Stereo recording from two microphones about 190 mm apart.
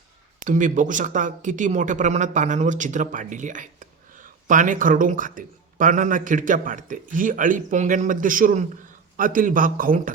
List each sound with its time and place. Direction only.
0.3 s speech: 40° right (ahead or behind)